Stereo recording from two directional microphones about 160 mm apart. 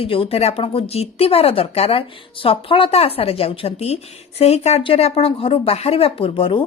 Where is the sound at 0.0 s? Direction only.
35° left (ahead or behind).